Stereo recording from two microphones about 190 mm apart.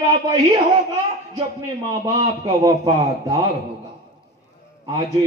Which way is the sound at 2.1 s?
15° right (ahead or behind).